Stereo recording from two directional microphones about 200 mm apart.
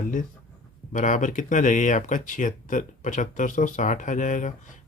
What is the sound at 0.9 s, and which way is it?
Speech, 40° left (ahead or behind).